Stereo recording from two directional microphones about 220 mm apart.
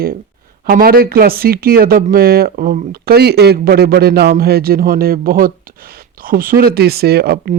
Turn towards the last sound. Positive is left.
turn(degrees=-45)  # may be behind; listen again after turning